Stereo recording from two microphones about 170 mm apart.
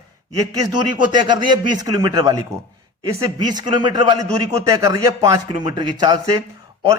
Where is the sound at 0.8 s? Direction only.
25° right (ahead or behind).